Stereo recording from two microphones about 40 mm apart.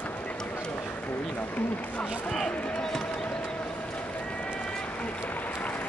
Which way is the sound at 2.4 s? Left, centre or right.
Left.